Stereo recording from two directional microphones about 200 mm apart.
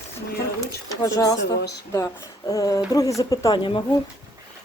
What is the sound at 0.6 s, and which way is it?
Speech, 15° left (ahead or behind).